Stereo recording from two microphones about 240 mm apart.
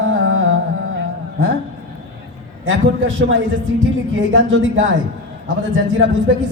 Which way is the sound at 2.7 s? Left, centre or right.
Right.